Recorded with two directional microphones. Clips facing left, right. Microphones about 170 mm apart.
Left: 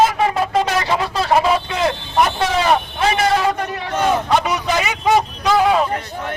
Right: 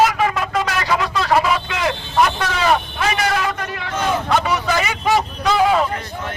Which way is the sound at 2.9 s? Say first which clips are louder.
Left 3 dB; 25° left (ahead or behind).